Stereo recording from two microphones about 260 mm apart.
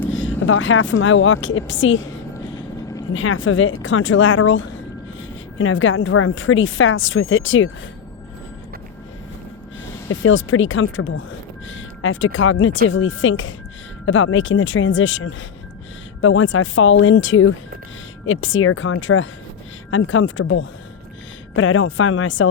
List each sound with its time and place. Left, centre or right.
0.3 s a woman's voice: left
3.2 s a woman's voice: left
10.1 s a woman's voice: left